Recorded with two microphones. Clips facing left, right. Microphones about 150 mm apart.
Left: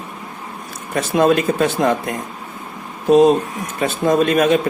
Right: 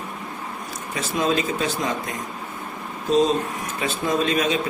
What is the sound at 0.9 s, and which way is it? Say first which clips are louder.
Speech: left 8 dB; 60° left (ahead or behind).